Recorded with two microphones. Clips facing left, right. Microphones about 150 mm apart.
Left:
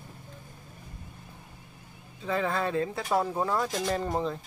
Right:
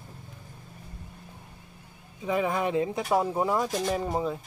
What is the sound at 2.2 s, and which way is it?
Speech, 15° right (ahead or behind).